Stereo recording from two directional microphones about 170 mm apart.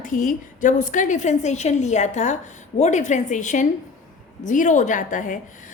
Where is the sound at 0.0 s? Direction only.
50° left (ahead or behind).